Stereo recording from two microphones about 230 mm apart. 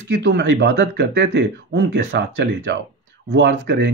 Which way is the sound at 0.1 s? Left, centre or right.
Right.